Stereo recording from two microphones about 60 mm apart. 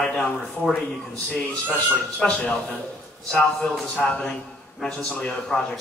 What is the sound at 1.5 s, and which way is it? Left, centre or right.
A man's voice, centre.